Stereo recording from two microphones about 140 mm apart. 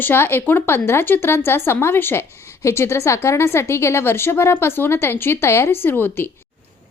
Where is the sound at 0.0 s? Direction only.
15° left (ahead or behind).